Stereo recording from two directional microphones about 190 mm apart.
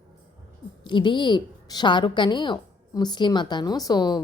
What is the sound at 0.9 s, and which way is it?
A woman's voice, 25° left (ahead or behind).